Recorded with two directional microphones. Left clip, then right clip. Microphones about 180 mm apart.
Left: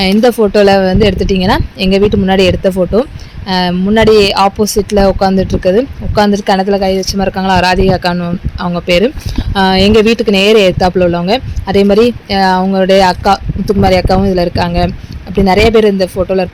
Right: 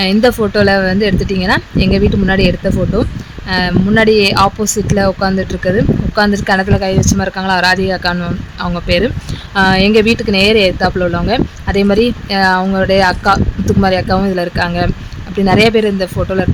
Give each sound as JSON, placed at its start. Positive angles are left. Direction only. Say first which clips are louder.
{"t": 0.0, "sound": "speech", "louder": "left 3 dB", "side_deg": 15}